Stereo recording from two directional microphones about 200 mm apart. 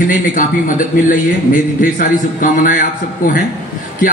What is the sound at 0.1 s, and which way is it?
A man's voice, 40° left (ahead or behind).